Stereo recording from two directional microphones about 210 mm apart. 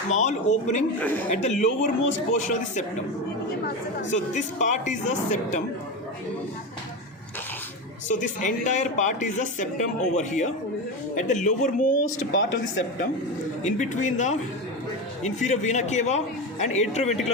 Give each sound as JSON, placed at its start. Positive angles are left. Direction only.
{"t": 0.1, "sound": "speech", "side_deg": 35}
{"t": 0.9, "sound": "speech", "side_deg": 10}
{"t": 1.4, "sound": "speech", "side_deg": 35}
{"t": 4.1, "sound": "speech", "side_deg": 35}
{"t": 8.0, "sound": "speech", "side_deg": 35}
{"t": 12.3, "sound": "speech", "side_deg": 65}
{"t": 13.7, "sound": "speech", "side_deg": 35}